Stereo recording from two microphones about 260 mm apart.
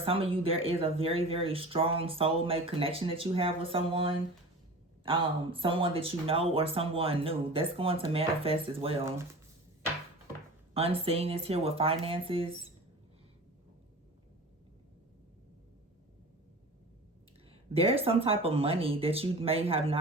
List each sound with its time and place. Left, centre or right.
0.0 s speech: right
10.8 s speech: right
17.5 s speech: right